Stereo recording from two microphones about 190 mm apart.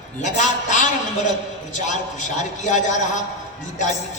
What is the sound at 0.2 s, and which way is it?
A man's voice, 40° left (ahead or behind).